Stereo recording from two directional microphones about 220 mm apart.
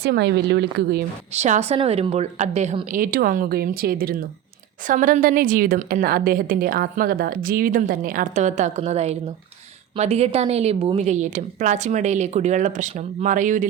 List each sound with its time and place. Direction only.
0.0 s speech: 50° right (ahead or behind)
1.3 s a woman's voice: 30° right (ahead or behind)